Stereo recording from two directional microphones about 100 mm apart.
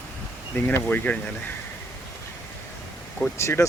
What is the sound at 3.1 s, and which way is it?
Speech, 20° left (ahead or behind).